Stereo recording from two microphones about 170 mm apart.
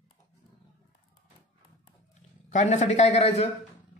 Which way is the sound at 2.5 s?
45° left (ahead or behind).